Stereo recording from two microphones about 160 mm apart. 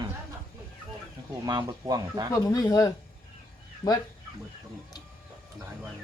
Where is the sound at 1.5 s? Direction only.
25° right (ahead or behind).